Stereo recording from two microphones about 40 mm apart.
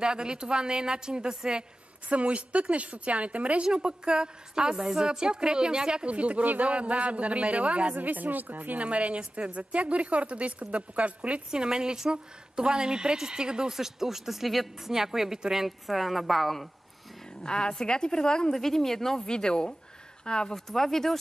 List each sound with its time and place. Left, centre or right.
0.0 s a woman's voice: right
2.0 s a woman's voice: right
3.6 s a woman's voice: right
6.0 s a woman's voice: right
7.9 s a woman's voice: right
8.8 s a woman's voice: right
11.5 s a woman's voice: centre
17.4 s a woman's voice: left
18.5 s a woman's voice: centre
20.5 s speech: centre